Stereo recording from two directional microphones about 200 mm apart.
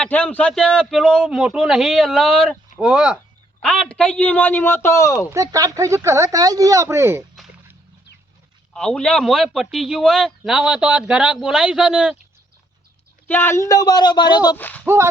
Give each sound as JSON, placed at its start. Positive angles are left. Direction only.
{"t": 0.0, "sound": "a man's voice", "side_deg": 5}
{"t": 5.3, "sound": "speech", "side_deg": -15}
{"t": 8.7, "sound": "a man's voice", "side_deg": 5}
{"t": 13.2, "sound": "speech", "side_deg": 10}
{"t": 14.5, "sound": "a man's voice", "side_deg": 10}
{"t": 14.8, "sound": "speech", "side_deg": -15}